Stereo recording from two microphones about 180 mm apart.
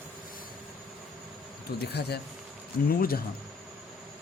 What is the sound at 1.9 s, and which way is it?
Speech, 65° left (ahead or behind).